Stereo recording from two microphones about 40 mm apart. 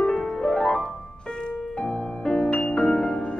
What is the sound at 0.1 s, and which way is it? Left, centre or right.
Music, centre.